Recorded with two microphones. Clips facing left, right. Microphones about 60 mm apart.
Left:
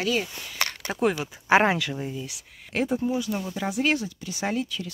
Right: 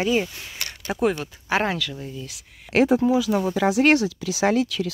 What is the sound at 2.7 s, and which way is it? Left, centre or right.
Speech, right.